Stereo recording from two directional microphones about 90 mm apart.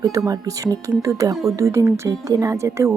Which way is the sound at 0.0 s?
45° right (ahead or behind).